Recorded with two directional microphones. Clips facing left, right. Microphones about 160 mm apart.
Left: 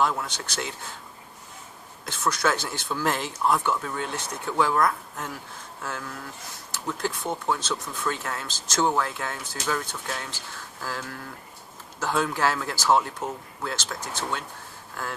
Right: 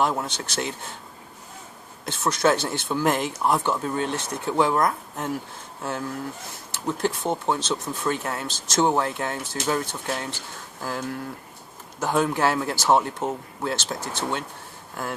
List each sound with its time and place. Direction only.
0.0 s speech: 25° right (ahead or behind)
2.0 s speech: 20° right (ahead or behind)